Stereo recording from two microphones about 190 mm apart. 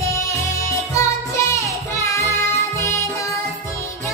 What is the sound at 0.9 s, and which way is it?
Music, 15° left (ahead or behind).